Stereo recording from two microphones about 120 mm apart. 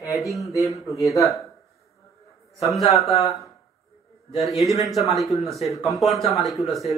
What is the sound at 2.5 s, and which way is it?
Speech, centre (ahead or behind).